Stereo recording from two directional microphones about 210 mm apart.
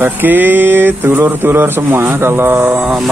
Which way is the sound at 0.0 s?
10° right (ahead or behind).